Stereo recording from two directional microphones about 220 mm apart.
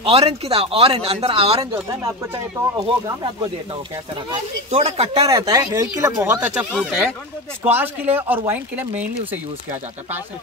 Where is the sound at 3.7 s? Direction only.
25° right (ahead or behind).